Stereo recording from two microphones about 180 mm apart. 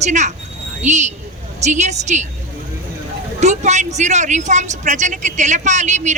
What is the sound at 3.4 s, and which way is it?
Speech, 40° right (ahead or behind).